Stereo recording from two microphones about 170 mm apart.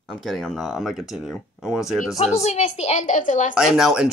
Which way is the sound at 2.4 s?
40° left (ahead or behind).